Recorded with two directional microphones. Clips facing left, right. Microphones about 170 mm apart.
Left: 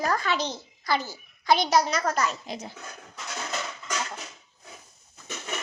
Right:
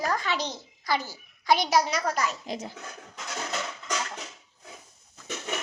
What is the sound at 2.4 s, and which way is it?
Speech, 40° right (ahead or behind).